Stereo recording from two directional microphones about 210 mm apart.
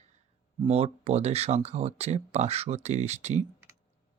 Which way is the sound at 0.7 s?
30° right (ahead or behind).